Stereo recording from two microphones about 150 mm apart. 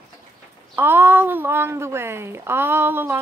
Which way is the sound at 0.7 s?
15° right (ahead or behind).